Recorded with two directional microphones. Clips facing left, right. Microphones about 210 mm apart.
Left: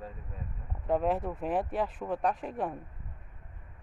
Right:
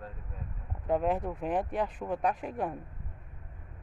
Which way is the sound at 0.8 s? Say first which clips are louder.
Even; centre (ahead or behind).